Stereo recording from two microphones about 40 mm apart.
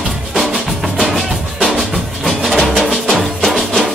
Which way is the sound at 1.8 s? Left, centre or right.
Centre.